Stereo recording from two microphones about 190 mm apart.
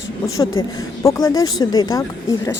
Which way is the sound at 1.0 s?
15° left (ahead or behind).